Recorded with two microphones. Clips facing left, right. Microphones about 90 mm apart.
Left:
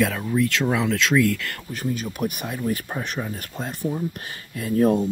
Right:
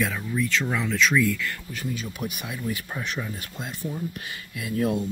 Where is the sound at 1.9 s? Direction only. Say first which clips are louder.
Left 5 dB; 50° left (ahead or behind).